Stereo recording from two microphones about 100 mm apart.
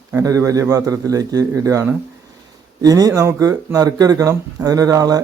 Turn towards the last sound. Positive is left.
turn(degrees=-40)  # may be behind; listen again after turning